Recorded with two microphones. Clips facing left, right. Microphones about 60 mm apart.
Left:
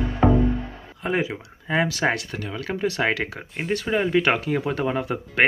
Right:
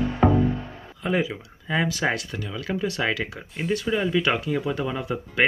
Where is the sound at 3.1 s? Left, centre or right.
Left.